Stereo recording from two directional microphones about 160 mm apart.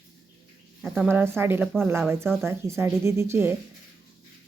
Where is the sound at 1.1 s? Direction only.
15° right (ahead or behind).